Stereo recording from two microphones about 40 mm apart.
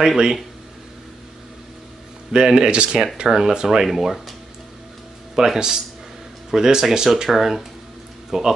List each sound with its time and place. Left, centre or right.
0.0 s speech: centre
2.3 s speech: right
5.3 s speech: centre